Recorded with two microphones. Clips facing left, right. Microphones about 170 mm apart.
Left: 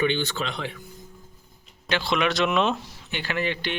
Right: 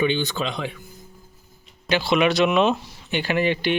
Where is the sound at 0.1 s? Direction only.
15° right (ahead or behind).